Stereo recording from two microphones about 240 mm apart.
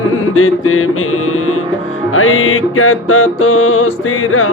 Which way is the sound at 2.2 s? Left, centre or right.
Left.